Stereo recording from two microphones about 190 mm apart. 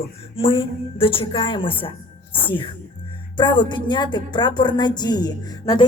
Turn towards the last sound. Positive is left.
turn(degrees=20)  # may be behind; listen again after turning